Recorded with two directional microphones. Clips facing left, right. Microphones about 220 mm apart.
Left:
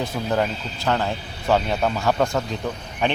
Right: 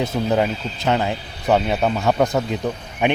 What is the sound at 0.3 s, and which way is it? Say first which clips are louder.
Speech: right 3 dB; 15° right (ahead or behind).